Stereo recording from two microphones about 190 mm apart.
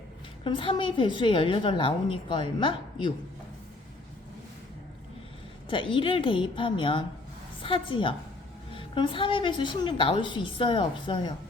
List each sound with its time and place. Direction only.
0.4 s a woman's voice: 25° left (ahead or behind)
5.6 s a woman's voice: 25° left (ahead or behind)